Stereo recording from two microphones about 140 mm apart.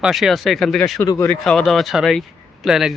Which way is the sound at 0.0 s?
Centre (ahead or behind).